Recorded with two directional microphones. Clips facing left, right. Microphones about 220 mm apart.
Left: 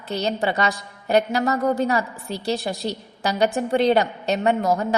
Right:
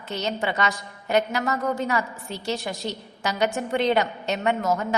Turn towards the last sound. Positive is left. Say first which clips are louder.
# left 3 dB
turn(degrees=35)  # may be behind; listen again after turning